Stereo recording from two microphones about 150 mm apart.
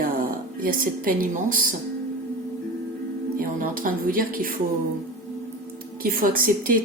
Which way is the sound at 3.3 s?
70° right (ahead or behind).